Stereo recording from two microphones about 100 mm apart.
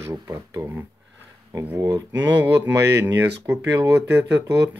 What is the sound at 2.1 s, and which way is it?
Speech, 15° right (ahead or behind).